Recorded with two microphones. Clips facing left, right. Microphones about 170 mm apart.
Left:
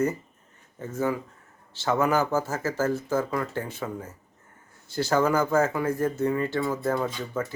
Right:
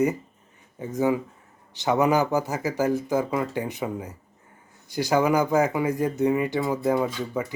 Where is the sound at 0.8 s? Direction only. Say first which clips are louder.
Right 4 dB; 15° right (ahead or behind).